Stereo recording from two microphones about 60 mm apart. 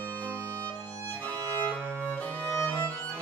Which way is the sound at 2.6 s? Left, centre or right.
Left.